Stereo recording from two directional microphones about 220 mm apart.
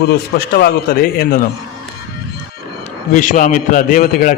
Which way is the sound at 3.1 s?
35° left (ahead or behind).